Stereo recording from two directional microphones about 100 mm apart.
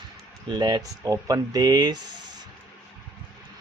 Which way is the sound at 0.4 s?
45° right (ahead or behind).